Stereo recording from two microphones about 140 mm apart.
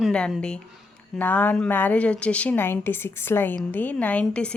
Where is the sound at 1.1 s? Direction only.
15° left (ahead or behind).